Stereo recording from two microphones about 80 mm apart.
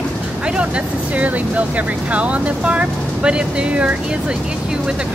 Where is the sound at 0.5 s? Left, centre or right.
Centre.